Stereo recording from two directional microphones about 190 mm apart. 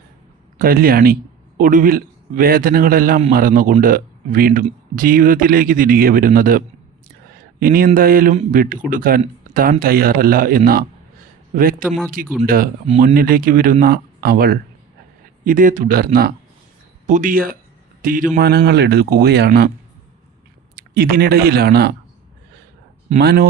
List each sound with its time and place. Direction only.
0.6 s speech: 50° right (ahead or behind)
7.6 s speech: 50° right (ahead or behind)
11.9 s speech: centre (ahead or behind)
12.5 s speech: 50° right (ahead or behind)
15.4 s a man's voice: 45° right (ahead or behind)
18.3 s speech: 55° right (ahead or behind)
19.5 s speech: 45° right (ahead or behind)
20.7 s speech: 55° right (ahead or behind)
23.2 s speech: 55° right (ahead or behind)